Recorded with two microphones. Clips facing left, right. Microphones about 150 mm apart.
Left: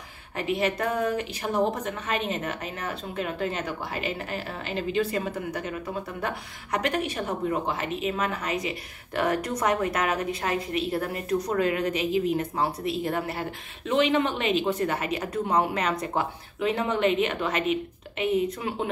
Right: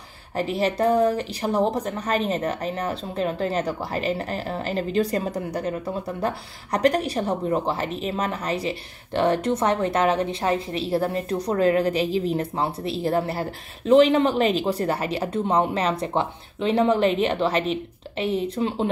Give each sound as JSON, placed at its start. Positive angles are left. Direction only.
{"t": 0.4, "sound": "a woman's voice", "side_deg": -35}